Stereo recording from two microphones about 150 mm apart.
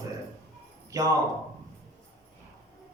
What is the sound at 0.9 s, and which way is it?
Speech, 20° right (ahead or behind).